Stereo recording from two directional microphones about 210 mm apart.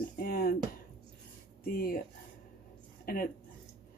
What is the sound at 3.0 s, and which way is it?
Speech, 45° left (ahead or behind).